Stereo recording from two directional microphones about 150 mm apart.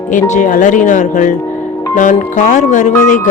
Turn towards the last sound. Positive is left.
turn(degrees=55)  # may be behind; listen again after turning